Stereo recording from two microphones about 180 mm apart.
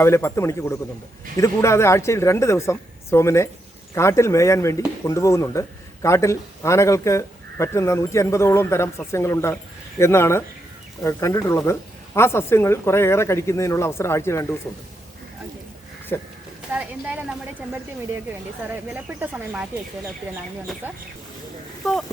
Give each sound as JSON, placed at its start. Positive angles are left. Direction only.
{"t": 0.0, "sound": "a man's voice", "side_deg": 15}
{"t": 16.1, "sound": "a man's voice", "side_deg": 15}
{"t": 16.7, "sound": "speech", "side_deg": -5}
{"t": 18.7, "sound": "speech", "side_deg": -10}
{"t": 20.8, "sound": "speech", "side_deg": -10}